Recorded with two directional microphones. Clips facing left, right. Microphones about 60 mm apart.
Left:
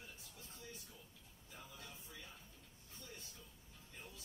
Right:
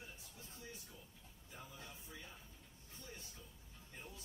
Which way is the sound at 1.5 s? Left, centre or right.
Centre.